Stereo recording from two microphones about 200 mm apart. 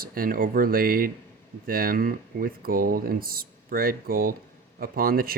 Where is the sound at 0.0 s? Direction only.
45° right (ahead or behind).